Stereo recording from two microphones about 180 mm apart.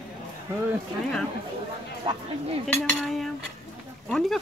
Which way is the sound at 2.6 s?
5° left (ahead or behind).